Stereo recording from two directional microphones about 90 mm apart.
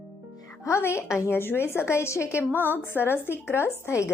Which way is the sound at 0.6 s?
30° left (ahead or behind).